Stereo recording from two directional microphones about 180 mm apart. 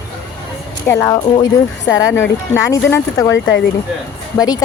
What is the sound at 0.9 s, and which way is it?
Speech, 15° left (ahead or behind).